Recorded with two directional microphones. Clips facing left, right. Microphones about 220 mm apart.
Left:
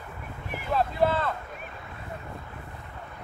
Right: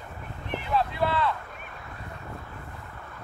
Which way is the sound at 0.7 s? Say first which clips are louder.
Left 2 dB; 45° left (ahead or behind).